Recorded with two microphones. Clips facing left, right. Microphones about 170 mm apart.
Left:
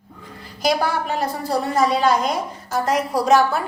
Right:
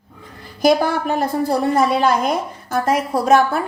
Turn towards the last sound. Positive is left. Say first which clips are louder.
# right 2 dB
turn(degrees=-50)  # may be behind; listen again after turning